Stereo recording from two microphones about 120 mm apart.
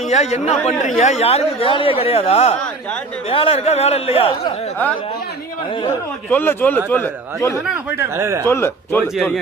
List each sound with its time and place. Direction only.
0.1 s a man's voice: 70° left (ahead or behind)
6.3 s a man's voice: 20° left (ahead or behind)
8.1 s speech: 20° right (ahead or behind)
8.4 s a man's voice: 20° left (ahead or behind)